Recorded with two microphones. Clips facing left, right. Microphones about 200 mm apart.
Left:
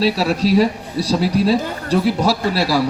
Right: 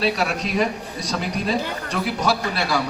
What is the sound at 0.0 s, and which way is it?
Speech, 35° left (ahead or behind).